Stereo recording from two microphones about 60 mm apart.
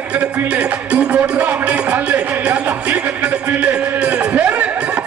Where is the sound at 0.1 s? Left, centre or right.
Right.